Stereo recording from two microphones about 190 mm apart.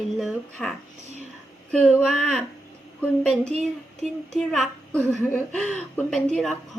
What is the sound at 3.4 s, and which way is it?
Speech, 35° right (ahead or behind).